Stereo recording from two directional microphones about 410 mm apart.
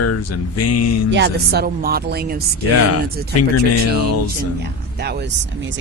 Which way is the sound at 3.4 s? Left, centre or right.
Left.